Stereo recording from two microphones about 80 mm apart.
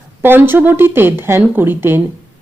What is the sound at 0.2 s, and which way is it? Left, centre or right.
Speech, right.